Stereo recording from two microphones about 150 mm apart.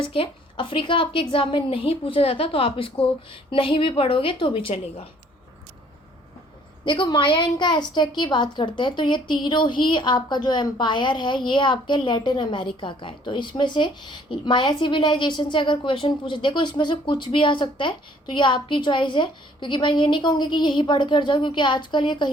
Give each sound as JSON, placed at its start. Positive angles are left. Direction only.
{"t": 0.0, "sound": "a woman's voice", "side_deg": 35}
{"t": 6.8, "sound": "a woman's voice", "side_deg": 30}